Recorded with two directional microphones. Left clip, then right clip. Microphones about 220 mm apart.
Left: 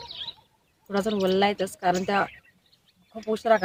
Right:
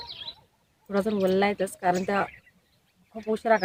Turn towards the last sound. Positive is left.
turn(degrees=5)  # may be behind; listen again after turning